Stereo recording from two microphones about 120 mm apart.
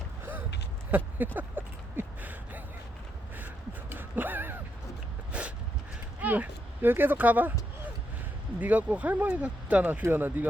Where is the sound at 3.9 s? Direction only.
15° right (ahead or behind).